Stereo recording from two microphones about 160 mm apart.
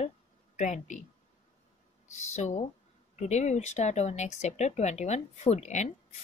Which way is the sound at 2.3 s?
45° left (ahead or behind).